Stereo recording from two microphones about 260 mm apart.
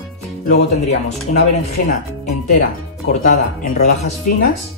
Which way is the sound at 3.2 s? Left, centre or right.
Left.